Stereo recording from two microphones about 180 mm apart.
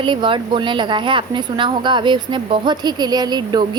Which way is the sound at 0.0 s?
25° right (ahead or behind).